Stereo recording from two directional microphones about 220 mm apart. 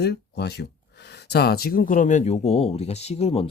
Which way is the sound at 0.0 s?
50° left (ahead or behind).